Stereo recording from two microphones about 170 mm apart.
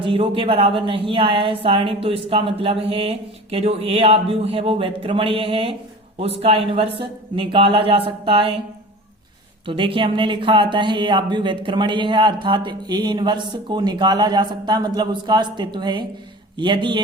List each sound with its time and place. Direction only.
0.0 s a woman's voice: 30° right (ahead or behind)
9.6 s speech: 30° right (ahead or behind)